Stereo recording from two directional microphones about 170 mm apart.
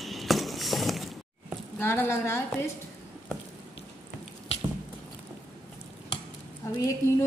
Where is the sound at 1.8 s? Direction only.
15° left (ahead or behind).